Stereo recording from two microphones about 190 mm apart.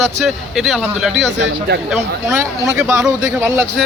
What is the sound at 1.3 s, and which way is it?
Speech, 65° right (ahead or behind).